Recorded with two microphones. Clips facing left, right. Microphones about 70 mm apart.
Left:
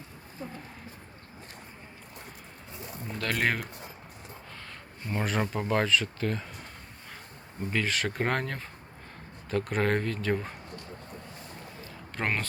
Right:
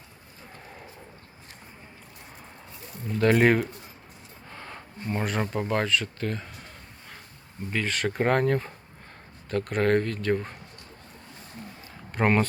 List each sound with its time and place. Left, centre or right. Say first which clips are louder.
3.2 s speech: right 11 dB; centre
3.4 s speech: right 4 dB; centre
4.5 s a sound: right 9 dB; centre
5.0 s speech: right 1 dB; centre
7.7 s speech: right 2 dB; centre
12.1 s speech: right 8 dB; centre